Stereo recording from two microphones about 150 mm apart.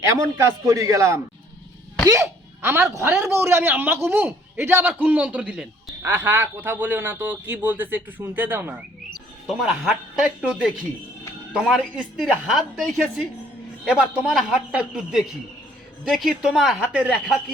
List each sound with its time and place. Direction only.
0.0 s a man's voice: 20° right (ahead or behind)
9.5 s a woman's voice: centre (ahead or behind)